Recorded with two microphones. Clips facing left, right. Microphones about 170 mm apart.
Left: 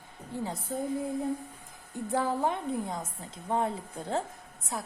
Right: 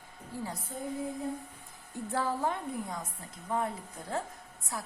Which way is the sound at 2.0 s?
15° left (ahead or behind).